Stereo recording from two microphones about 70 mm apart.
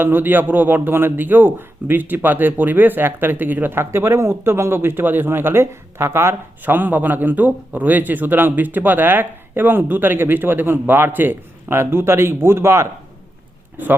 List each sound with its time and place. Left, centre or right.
0.0 s speech: right